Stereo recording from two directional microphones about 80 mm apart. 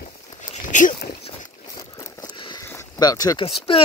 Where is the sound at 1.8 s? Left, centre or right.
Left.